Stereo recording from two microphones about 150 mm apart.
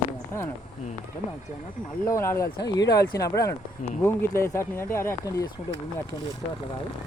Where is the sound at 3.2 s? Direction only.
20° left (ahead or behind).